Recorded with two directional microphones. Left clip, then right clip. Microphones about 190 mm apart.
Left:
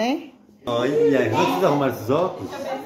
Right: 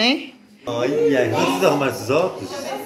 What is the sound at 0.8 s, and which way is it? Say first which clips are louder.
A man's voice: right 1 dB; 45° left (ahead or behind).